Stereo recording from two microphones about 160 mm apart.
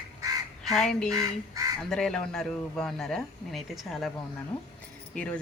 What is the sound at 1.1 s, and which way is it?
Speech, 20° right (ahead or behind).